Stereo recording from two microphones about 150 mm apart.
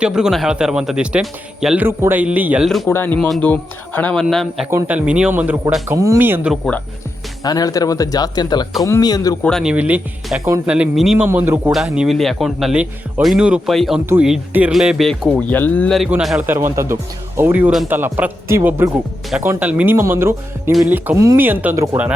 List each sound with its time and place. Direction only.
0.0 s a man's voice: 5° right (ahead or behind)
2.8 s speech: 15° left (ahead or behind)
3.2 s a man's voice: centre (ahead or behind); by 6.5 s 15° right (ahead or behind)
6.5 s speech: 10° left (ahead or behind)
7.4 s speech: 25° left (ahead or behind)
9.4 s speech: 5° left (ahead or behind)
9.7 s a man's voice: 10° right (ahead or behind)
11.3 s a man's voice: 15° right (ahead or behind)
11.7 s speech: centre (ahead or behind)
15.3 s speech: 10° left (ahead or behind)
16.0 s speech: 5° right (ahead or behind)
16.5 s a man's voice: 15° right (ahead or behind)